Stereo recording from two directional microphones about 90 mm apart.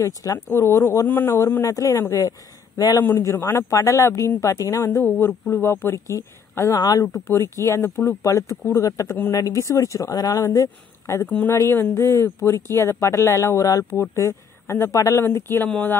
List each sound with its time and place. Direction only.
0.0 s speech: 40° left (ahead or behind); by 1.4 s 25° left (ahead or behind)
1.7 s speech: 40° left (ahead or behind)
3.2 s speech: 30° left (ahead or behind)
7.2 s speech: 30° left (ahead or behind)
11.2 s speech: 20° left (ahead or behind); by 15.2 s 35° left (ahead or behind)
15.2 s speech: 25° left (ahead or behind)